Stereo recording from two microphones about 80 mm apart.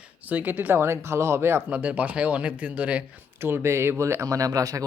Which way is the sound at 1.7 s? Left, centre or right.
Centre.